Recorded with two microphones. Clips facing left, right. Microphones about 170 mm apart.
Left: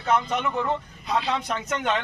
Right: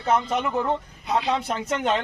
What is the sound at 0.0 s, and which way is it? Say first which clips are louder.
Speech: right 1 dB; 30° right (ahead or behind).